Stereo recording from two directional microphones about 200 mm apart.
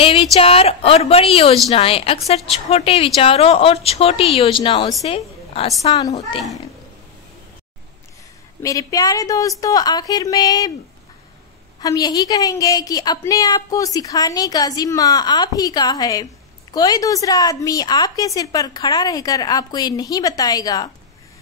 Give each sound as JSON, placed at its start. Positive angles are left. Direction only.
{"t": 0.0, "sound": "a woman's voice", "side_deg": 25}
{"t": 5.7, "sound": "a woman's voice", "side_deg": 20}
{"t": 8.6, "sound": "a woman's voice", "side_deg": 15}
{"t": 11.8, "sound": "a woman's voice", "side_deg": 20}